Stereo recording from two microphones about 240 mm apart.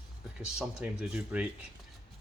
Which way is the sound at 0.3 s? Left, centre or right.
Centre.